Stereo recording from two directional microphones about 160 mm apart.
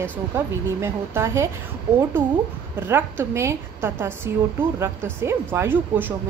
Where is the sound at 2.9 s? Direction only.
15° right (ahead or behind).